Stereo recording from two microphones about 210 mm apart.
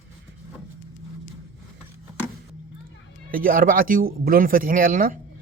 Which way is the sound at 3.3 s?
45° right (ahead or behind).